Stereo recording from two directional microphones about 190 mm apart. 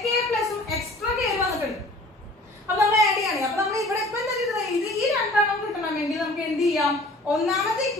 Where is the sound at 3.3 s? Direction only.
15° right (ahead or behind).